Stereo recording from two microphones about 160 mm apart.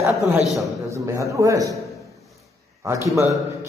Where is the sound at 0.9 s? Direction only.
20° right (ahead or behind).